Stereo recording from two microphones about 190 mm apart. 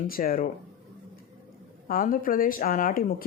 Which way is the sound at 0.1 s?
50° left (ahead or behind).